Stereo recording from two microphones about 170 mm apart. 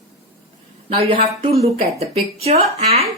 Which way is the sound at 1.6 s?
40° right (ahead or behind).